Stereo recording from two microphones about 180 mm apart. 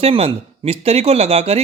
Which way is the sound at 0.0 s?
30° right (ahead or behind).